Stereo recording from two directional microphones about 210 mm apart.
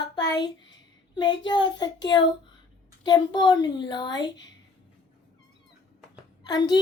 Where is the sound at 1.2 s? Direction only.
20° left (ahead or behind).